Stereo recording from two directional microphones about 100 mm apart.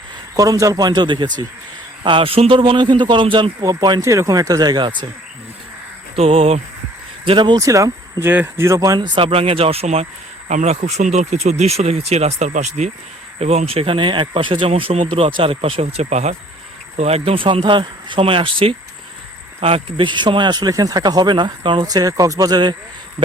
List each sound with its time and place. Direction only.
0.3 s speech: 35° right (ahead or behind)
2.0 s speech: 65° right (ahead or behind)
3.6 s speech: 35° right (ahead or behind)
4.0 s speech: 30° right (ahead or behind); by 5.0 s 50° right (ahead or behind)
6.1 s speech: 75° right (ahead or behind)
7.3 s speech: 50° right (ahead or behind)
7.6 s speech: 35° right (ahead or behind)
8.2 s speech: 20° right (ahead or behind)
9.0 s speech: 60° right (ahead or behind); by 12.3 s 90° right
13.4 s speech: 85° right; by 18.8 s 65° right (ahead or behind)
19.5 s speech: 80° right; by 21.8 s 55° right (ahead or behind)
21.8 s speech: 40° right (ahead or behind)